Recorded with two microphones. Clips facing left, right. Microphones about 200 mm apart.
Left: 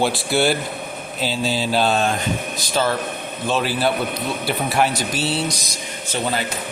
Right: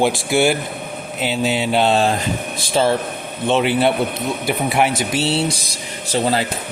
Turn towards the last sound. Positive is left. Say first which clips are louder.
# right 5 dB
turn(degrees=-35)  # may be behind; listen again after turning